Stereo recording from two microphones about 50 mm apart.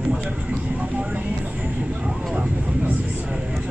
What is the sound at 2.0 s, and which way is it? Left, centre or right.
Vehicle, centre.